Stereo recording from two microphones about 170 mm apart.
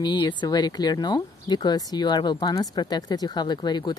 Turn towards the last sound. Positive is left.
turn(degrees=25)  # may be behind; listen again after turning